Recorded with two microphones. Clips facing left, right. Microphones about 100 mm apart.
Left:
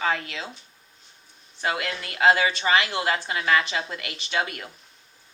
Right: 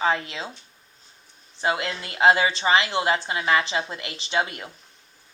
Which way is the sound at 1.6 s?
25° right (ahead or behind).